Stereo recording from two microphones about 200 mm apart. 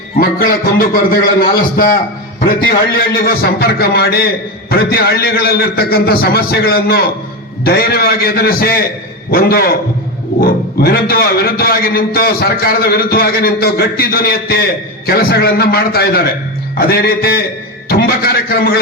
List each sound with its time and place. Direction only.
0.2 s a man's voice: 45° left (ahead or behind)